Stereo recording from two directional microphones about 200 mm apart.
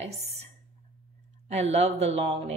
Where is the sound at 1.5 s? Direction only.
35° right (ahead or behind).